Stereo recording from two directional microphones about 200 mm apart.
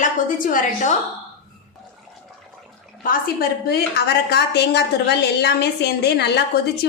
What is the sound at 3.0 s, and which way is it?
A woman's voice, 50° left (ahead or behind).